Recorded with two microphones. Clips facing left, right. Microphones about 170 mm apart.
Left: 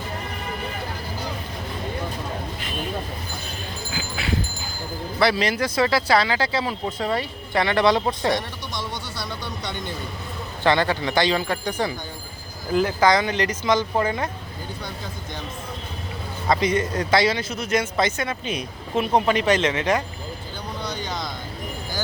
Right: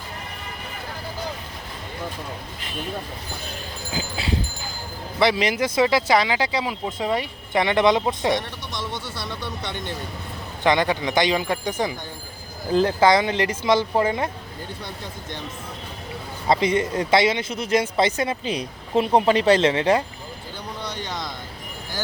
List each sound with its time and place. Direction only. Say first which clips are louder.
3.9 s dog: right 1 dB; 25° right (ahead or behind)
5.2 s speech: right 1 dB; 20° right (ahead or behind)
9.6 s speech: left 2 dB; centre (ahead or behind)
10.6 s speech: even; 15° right (ahead or behind)
16.5 s speech: right 1 dB; 25° right (ahead or behind)
20.8 s a sound: left 2 dB; 30° right (ahead or behind)